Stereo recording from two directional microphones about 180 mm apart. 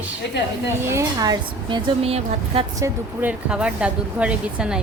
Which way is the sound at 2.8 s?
15° right (ahead or behind).